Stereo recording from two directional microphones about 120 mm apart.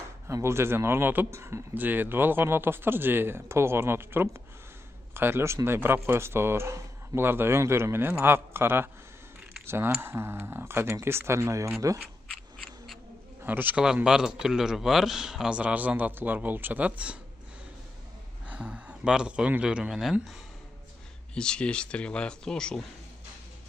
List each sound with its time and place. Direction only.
0.3 s speech: 20° right (ahead or behind)
13.4 s a man's voice: 15° right (ahead or behind)
18.5 s a man's voice: 10° right (ahead or behind)
21.4 s speech: 10° left (ahead or behind)